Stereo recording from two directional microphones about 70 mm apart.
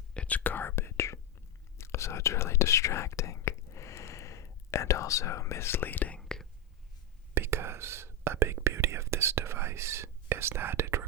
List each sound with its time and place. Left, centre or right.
0.1 s whispering: centre
6.1 s whispering: centre
7.3 s whispering: right